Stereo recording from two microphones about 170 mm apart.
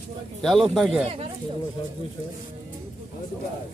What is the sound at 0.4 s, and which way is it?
Speech, centre (ahead or behind).